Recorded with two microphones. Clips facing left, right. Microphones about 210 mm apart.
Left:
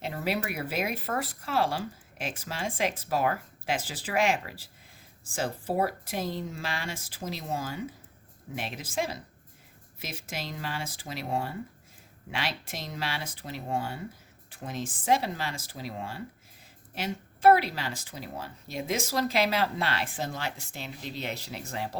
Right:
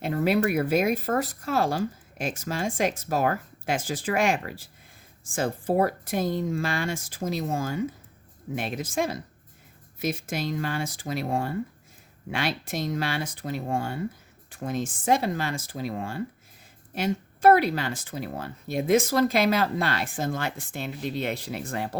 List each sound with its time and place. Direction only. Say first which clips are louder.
0.0 s speech: right 8 dB; 50° right (ahead or behind)